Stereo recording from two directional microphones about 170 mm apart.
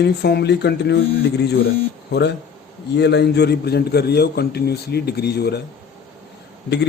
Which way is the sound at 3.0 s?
80° left.